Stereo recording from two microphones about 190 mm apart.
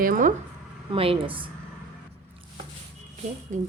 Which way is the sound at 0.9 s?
30° right (ahead or behind).